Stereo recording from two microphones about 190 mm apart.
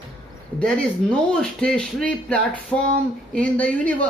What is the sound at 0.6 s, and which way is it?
Speech, 5° left (ahead or behind).